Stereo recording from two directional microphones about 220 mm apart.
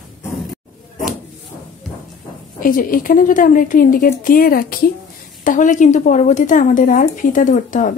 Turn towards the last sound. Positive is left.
turn(degrees=35)  # may be behind; listen again after turning